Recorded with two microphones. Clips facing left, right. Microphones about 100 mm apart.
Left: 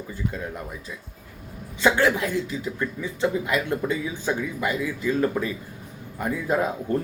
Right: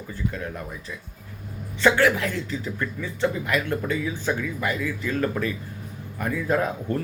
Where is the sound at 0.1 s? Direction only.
15° left (ahead or behind).